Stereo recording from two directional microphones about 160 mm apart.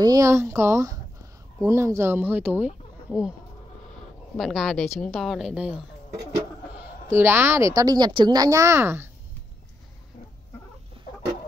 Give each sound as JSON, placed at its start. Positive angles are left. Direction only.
{"t": 0.0, "sound": "speech", "side_deg": -20}
{"t": 4.4, "sound": "speech", "side_deg": 0}
{"t": 7.1, "sound": "speech", "side_deg": -15}